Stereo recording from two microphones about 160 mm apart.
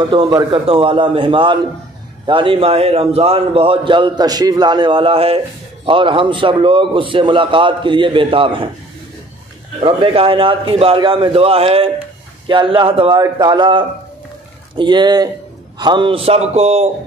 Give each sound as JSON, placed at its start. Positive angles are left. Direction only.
{"t": 0.0, "sound": "a man's voice", "side_deg": -30}
{"t": 9.8, "sound": "a man's voice", "side_deg": -35}